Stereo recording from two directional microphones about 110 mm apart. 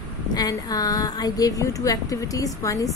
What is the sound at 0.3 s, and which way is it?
A woman's voice, 35° left (ahead or behind).